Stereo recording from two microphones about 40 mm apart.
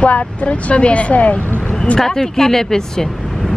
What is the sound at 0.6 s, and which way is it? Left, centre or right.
Speech, left.